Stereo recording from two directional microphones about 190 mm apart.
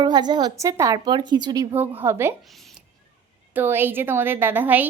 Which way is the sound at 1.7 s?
10° right (ahead or behind).